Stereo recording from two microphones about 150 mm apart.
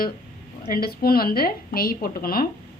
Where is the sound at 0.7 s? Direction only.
85° left.